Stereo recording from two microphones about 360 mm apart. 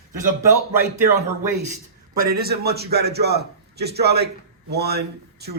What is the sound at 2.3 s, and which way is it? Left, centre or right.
A man's voice, right.